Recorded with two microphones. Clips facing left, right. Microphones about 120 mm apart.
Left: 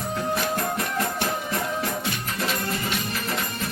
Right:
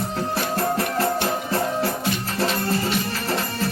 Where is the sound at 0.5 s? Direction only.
30° right (ahead or behind).